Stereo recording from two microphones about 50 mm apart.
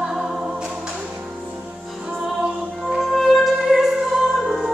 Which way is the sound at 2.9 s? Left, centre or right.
Centre.